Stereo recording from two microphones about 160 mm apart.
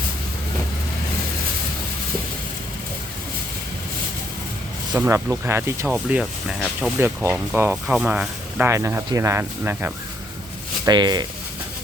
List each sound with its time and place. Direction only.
4.9 s speech: 15° right (ahead or behind)
10.8 s speech: 25° right (ahead or behind)